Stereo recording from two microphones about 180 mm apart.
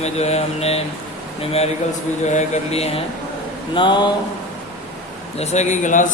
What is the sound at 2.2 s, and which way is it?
Mantra, 40° left (ahead or behind).